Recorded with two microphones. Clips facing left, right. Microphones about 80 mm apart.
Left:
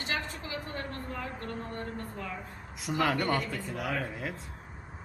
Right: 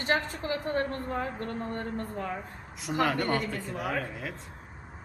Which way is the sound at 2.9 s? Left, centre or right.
Centre.